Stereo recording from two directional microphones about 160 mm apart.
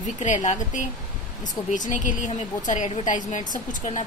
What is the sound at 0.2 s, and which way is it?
A woman's voice, 50° left (ahead or behind).